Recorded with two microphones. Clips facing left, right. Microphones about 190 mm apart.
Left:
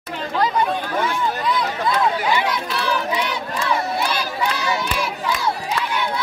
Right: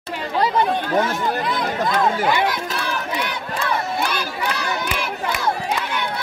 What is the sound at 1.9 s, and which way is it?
Run, 50° right (ahead or behind).